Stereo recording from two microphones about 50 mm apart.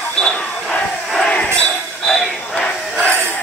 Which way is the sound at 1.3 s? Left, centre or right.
Left.